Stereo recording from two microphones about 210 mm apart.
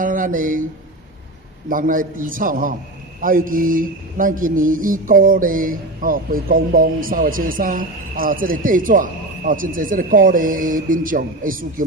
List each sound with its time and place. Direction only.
0.0 s speech: 40° right (ahead or behind)
1.7 s mantra: 40° right (ahead or behind)